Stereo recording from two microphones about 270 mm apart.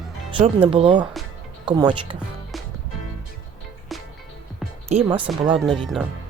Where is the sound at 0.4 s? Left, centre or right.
Centre.